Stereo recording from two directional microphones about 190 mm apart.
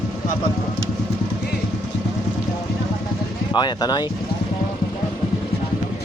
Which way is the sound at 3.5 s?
25° left (ahead or behind).